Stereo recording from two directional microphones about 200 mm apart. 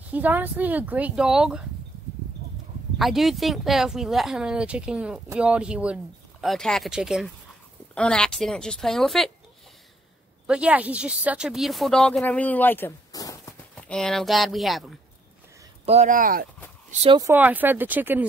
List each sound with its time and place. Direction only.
0.1 s speech: 10° right (ahead or behind)
3.0 s speech: centre (ahead or behind)
10.4 s speech: 5° right (ahead or behind); by 13.6 s 15° left (ahead or behind)
13.7 s speech: 5° left (ahead or behind)
15.8 s speech: 35° right (ahead or behind)
16.9 s speech: 30° right (ahead or behind)
17.2 s speech: 10° right (ahead or behind)